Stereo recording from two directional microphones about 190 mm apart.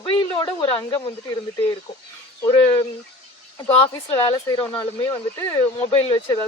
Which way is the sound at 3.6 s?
30° left (ahead or behind).